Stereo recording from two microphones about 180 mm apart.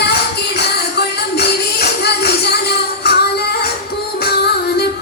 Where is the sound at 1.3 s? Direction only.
65° left (ahead or behind).